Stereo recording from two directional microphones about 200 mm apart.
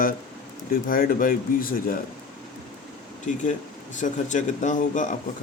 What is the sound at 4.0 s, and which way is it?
Speech, 40° left (ahead or behind).